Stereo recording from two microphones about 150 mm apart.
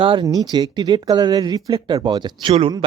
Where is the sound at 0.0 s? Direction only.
35° right (ahead or behind).